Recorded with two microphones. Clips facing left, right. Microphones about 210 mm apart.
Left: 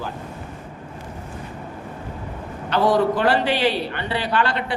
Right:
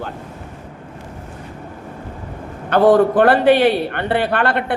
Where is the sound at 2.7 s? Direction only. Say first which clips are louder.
Right 6 dB; 55° right (ahead or behind).